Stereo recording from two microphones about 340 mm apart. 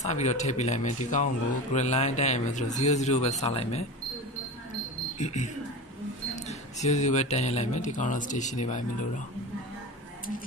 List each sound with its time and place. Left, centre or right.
0.0 s a man's voice: centre
5.2 s a man's voice: left
6.8 s a man's voice: left